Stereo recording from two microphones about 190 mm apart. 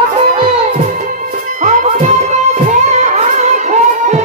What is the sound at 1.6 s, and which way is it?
Music, 40° right (ahead or behind).